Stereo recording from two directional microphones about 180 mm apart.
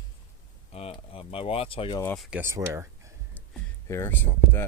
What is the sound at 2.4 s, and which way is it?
Speech, 15° right (ahead or behind).